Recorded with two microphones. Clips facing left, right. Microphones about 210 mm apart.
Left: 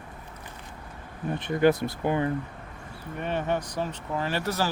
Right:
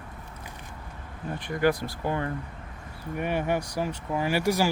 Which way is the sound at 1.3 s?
20° left (ahead or behind).